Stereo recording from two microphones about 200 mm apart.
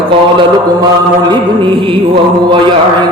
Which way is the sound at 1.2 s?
20° right (ahead or behind).